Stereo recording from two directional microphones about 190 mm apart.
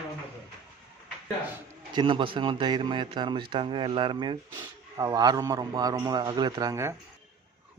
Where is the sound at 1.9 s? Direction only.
25° right (ahead or behind).